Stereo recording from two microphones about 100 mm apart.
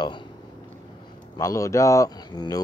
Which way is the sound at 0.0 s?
50° left (ahead or behind).